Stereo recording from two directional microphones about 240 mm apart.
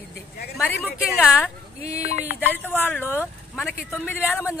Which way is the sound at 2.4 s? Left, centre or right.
Centre.